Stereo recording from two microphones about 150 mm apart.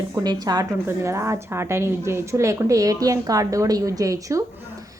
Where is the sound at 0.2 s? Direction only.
25° right (ahead or behind).